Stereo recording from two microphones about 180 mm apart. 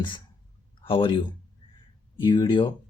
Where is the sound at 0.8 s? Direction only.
30° left (ahead or behind).